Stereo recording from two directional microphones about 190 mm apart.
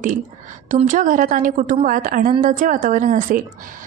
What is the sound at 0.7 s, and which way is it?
A woman's voice, 40° right (ahead or behind).